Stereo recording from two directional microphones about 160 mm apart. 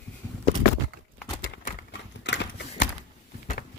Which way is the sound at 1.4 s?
75° left (ahead or behind).